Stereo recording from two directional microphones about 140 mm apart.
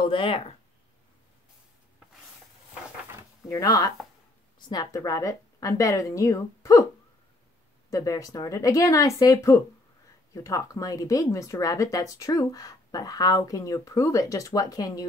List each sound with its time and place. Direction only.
0.0 s speech: 40° left (ahead or behind)
3.4 s speech: 25° left (ahead or behind)
7.9 s speech: 25° left (ahead or behind)